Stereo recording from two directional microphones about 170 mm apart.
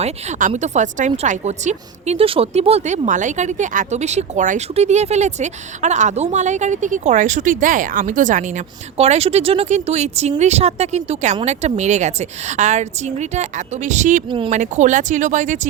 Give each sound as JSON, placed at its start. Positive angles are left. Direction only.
{"t": 0.0, "sound": "speech", "side_deg": -45}
{"t": 14.3, "sound": "speech", "side_deg": -30}
{"t": 14.5, "sound": "speech", "side_deg": -45}